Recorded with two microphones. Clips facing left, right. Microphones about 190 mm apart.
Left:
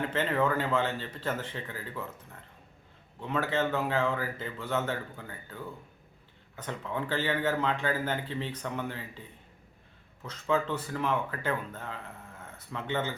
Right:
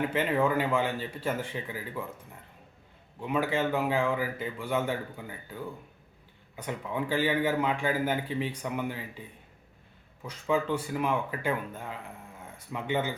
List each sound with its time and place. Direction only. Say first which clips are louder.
0.0 s speech: right 2 dB; 10° right (ahead or behind)
3.2 s speech: right 1 dB; 10° right (ahead or behind)
10.2 s speech: right 1 dB; 10° right (ahead or behind)